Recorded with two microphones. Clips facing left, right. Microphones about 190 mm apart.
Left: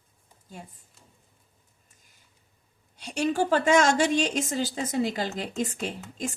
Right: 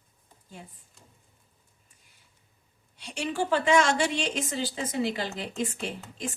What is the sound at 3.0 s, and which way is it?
A woman's voice, 40° left (ahead or behind).